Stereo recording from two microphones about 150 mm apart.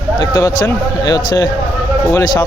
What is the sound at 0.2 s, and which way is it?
Speech, 25° left (ahead or behind).